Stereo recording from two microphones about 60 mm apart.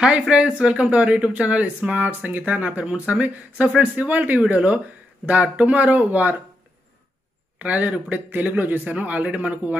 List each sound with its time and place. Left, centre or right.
0.3 s speech: centre
7.5 s speech: right